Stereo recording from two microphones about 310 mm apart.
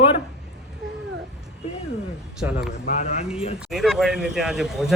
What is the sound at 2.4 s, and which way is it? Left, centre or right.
Speech, centre.